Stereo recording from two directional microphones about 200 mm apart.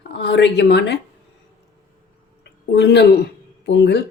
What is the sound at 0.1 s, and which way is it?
Speech, 60° left (ahead or behind).